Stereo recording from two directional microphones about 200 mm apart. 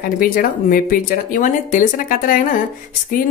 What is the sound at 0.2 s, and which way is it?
Speech, 45° left (ahead or behind).